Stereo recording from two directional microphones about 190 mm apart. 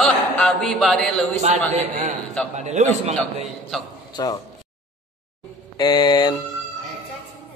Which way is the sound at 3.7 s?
Centre (ahead or behind).